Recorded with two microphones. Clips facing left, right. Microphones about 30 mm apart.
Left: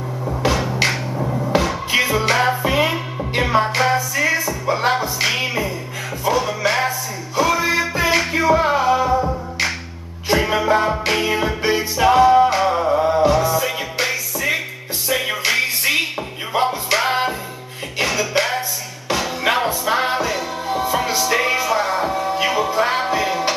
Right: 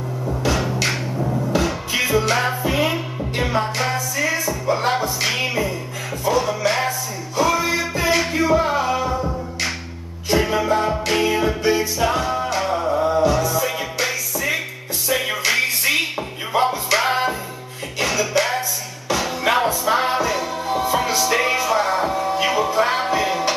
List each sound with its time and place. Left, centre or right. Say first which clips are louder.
1.1 s music: left 2 dB; centre
19.4 s music: right 1 dB; centre